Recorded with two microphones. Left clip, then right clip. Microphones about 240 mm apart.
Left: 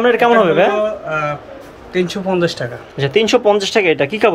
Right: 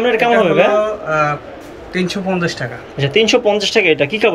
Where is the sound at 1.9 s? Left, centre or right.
Centre.